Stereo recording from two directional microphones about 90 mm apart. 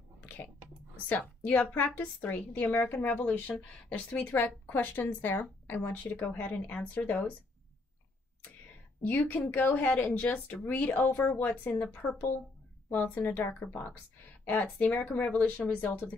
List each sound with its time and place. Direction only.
0.2 s a sound: 20° left (ahead or behind)
1.0 s a woman's voice: 20° left (ahead or behind)
9.0 s a woman's voice: 20° left (ahead or behind)